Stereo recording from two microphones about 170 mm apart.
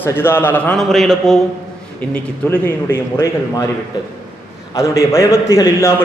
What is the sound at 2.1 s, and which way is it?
A man's voice, 10° left (ahead or behind).